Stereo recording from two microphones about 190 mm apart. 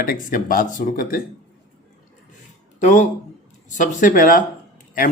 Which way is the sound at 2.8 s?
40° left (ahead or behind).